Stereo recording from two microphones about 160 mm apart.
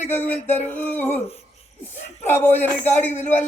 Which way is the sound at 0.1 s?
15° left (ahead or behind).